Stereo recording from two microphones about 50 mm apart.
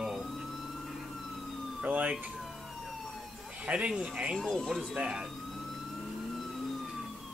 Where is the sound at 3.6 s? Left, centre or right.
Right.